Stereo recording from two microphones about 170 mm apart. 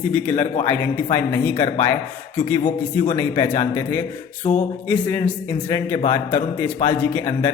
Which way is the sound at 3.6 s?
15° left (ahead or behind).